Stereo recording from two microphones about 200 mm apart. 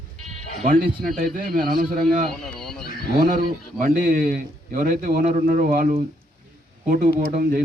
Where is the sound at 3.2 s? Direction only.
45° right (ahead or behind).